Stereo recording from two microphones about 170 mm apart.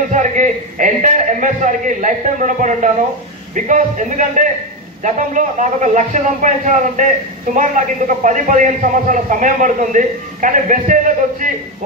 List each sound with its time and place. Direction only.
0.1 s a man's voice: 50° right (ahead or behind)